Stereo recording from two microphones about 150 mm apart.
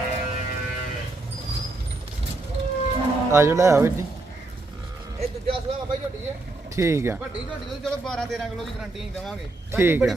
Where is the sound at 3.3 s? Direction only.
15° right (ahead or behind).